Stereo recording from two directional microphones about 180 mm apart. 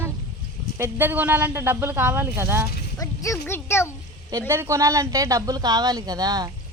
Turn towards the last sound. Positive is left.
turn(degrees=-20)  # may be behind; listen again after turning